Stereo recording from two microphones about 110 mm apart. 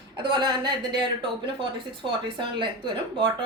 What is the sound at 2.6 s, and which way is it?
Speech, 45° right (ahead or behind).